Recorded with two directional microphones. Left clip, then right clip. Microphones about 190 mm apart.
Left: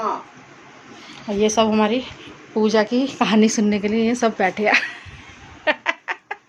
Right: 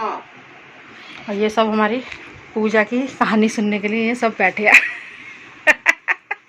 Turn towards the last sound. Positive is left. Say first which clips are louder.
# right 7 dB
turn(degrees=5)  # may be behind; listen again after turning